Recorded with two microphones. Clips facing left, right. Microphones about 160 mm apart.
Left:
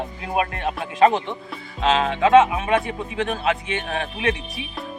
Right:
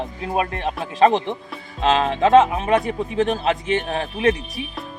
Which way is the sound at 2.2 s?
35° right (ahead or behind).